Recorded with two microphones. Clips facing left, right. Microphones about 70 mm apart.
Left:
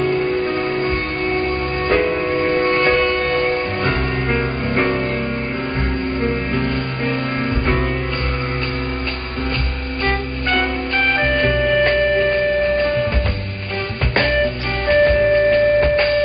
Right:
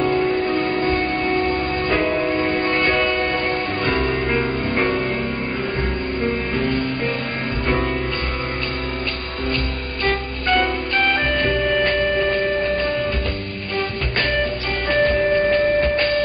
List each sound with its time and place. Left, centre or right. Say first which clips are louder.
0.0 s music: left 1 dB; centre
3.9 s music: even; centre
7.6 s music: right 2 dB; centre
10.0 s music: even; centre
14.3 s music: left 3 dB; centre